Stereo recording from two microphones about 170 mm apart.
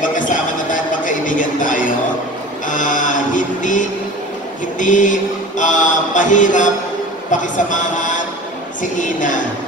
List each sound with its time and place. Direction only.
0.0 s a sound: 50° left (ahead or behind)
2.7 s mantra: 50° left (ahead or behind)
7.2 s a woman's voice: 50° left (ahead or behind)